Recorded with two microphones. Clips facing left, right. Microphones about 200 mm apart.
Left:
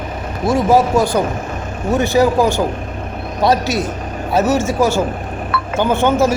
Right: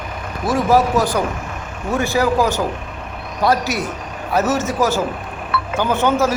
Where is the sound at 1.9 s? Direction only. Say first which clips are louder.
Left 4 dB; 20° left (ahead or behind).